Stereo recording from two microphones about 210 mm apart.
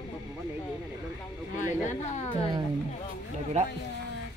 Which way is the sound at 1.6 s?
35° left (ahead or behind).